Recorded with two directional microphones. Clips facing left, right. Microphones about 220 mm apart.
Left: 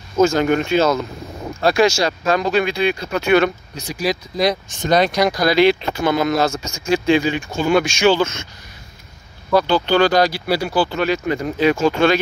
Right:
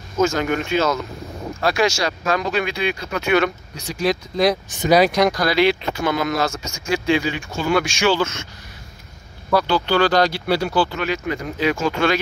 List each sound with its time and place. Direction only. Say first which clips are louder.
0.2 s speech: left 4 dB; 30° left (ahead or behind)
3.9 s speech: right 1 dB; centre (ahead or behind)
5.5 s speech: left 3 dB; 25° left (ahead or behind)
9.6 s speech: left 3 dB; 20° left (ahead or behind)
11.0 s speech: left 4 dB; 35° left (ahead or behind)